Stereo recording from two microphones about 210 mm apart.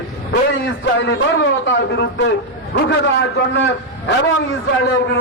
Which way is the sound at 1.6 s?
55° left (ahead or behind).